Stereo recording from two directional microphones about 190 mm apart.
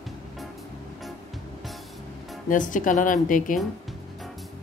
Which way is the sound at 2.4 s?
45° left (ahead or behind).